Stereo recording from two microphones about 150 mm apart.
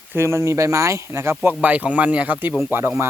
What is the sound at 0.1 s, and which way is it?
Speech, 15° right (ahead or behind).